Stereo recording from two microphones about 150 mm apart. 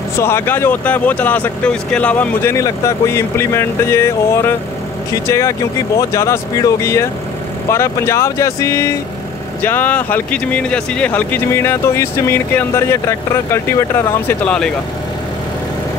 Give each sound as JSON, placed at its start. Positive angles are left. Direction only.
{"t": 0.2, "sound": "speech", "side_deg": 15}